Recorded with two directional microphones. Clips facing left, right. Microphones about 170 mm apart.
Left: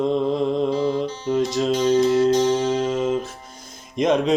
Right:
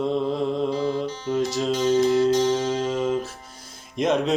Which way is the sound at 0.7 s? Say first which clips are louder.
Left 3 dB; 20° left (ahead or behind).